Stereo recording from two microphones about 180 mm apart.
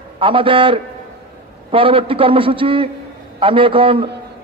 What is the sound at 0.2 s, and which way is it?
A man's voice, 30° right (ahead or behind).